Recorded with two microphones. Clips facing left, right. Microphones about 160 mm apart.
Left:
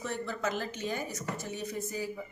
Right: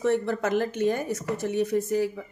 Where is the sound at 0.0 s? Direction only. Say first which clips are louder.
Right 10 dB; 65° right (ahead or behind).